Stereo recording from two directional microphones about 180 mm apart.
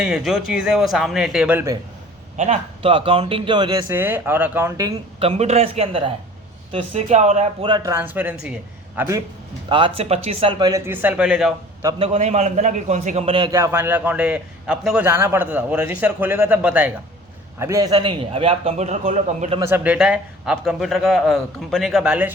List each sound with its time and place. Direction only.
0.0 s a man's voice: 5° right (ahead or behind)
2.4 s speech: 35° right (ahead or behind); by 4.9 s 20° right (ahead or behind)
5.2 s a man's voice: 35° right (ahead or behind)
7.7 s a man's voice: 15° right (ahead or behind)
9.6 s a man's voice: 30° right (ahead or behind)
10.6 s a man's voice: 20° right (ahead or behind); by 11.5 s 5° right (ahead or behind)
11.9 s a man's voice: 30° right (ahead or behind)
19.5 s a man's voice: 15° right (ahead or behind)